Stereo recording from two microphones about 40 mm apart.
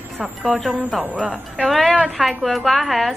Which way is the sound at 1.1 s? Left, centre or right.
Right.